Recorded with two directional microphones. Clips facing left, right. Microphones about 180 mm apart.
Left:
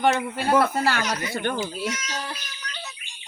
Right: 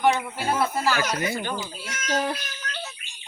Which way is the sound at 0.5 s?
65° left (ahead or behind).